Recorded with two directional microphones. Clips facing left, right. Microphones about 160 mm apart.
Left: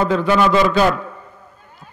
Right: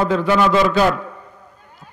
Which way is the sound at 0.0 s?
15° right (ahead or behind).